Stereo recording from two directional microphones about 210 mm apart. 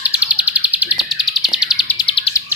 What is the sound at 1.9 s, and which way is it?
Bird, 25° left (ahead or behind).